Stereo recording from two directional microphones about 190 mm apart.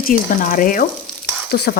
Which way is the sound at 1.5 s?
55° left (ahead or behind).